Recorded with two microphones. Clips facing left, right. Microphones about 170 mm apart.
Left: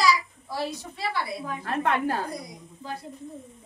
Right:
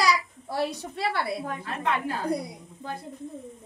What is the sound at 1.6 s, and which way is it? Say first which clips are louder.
Speech: left 5 dB; 50° left (ahead or behind).